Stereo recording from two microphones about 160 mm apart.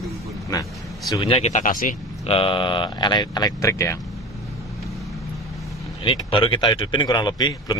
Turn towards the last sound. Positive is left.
turn(degrees=25)  # may be behind; listen again after turning